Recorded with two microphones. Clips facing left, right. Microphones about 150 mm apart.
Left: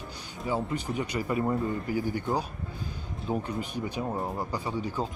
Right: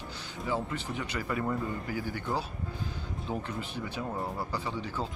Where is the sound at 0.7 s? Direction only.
15° left (ahead or behind).